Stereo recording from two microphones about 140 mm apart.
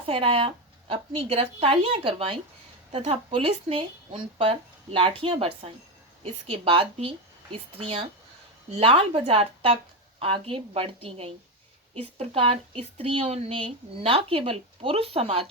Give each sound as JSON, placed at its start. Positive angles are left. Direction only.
{"t": 0.0, "sound": "speech", "side_deg": -40}